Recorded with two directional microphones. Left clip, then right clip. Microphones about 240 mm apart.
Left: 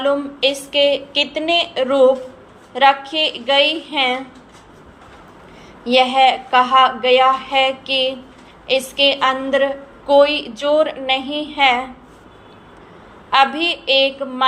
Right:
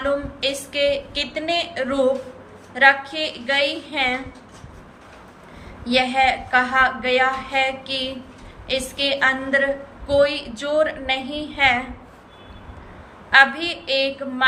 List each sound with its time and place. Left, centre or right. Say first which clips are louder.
0.0 s a woman's voice: left 5 dB; centre
5.8 s a woman's voice: left 5 dB; centre
13.3 s a woman's voice: even; centre